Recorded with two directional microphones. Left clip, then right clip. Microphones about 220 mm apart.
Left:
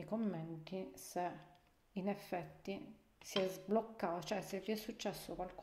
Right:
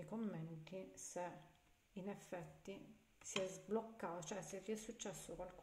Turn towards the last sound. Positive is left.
turn(degrees=35)  # may be behind; listen again after turning